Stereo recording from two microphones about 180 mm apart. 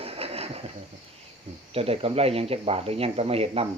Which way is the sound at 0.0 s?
35° right (ahead or behind).